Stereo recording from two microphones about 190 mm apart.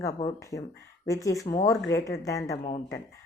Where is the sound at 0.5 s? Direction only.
15° left (ahead or behind).